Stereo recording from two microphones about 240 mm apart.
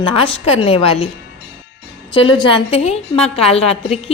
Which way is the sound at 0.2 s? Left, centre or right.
Left.